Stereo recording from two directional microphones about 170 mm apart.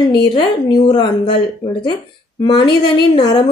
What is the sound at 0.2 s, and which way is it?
A woman's voice, 30° left (ahead or behind).